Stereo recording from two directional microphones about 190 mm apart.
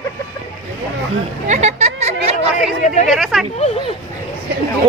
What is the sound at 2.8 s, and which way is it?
Speech, 40° left (ahead or behind).